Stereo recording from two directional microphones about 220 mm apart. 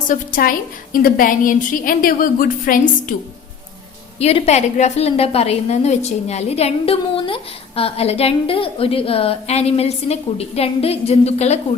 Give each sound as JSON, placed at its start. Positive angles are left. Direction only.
{"t": 0.1, "sound": "a woman's voice", "side_deg": 40}
{"t": 4.2, "sound": "a woman's voice", "side_deg": 30}